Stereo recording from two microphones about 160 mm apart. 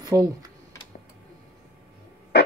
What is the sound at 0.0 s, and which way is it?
Speech, 25° right (ahead or behind).